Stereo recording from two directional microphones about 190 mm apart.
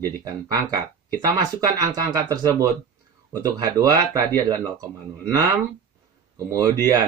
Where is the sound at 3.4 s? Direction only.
20° right (ahead or behind).